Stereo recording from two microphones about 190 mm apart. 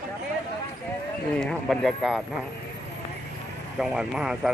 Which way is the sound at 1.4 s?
Centre (ahead or behind).